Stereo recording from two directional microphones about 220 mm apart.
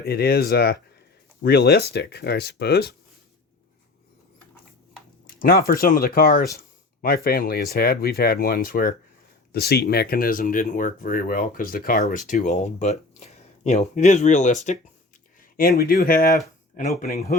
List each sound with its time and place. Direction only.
0.0 s speech: 45° left (ahead or behind)
5.2 s speech: 40° left (ahead or behind)
15.4 s a sound: 40° left (ahead or behind)
15.8 s speech: 45° left (ahead or behind)